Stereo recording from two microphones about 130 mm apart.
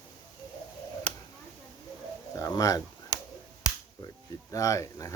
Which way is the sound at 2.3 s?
25° left (ahead or behind).